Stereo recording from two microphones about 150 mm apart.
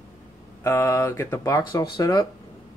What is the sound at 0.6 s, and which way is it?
Speech, 20° left (ahead or behind).